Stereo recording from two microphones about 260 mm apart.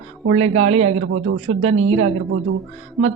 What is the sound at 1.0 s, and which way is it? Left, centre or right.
Speech, right.